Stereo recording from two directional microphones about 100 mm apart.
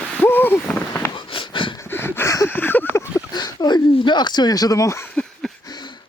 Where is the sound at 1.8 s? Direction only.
20° left (ahead or behind).